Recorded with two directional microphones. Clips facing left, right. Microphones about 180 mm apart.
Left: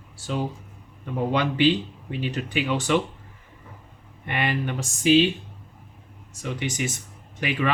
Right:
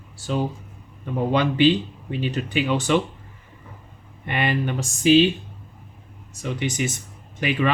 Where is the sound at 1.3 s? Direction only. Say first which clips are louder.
Right 3 dB; 25° right (ahead or behind).